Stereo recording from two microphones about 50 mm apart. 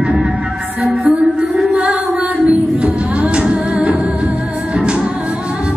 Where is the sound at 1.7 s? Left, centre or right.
Right.